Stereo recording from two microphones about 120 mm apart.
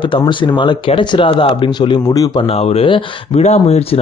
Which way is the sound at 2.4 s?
55° left (ahead or behind).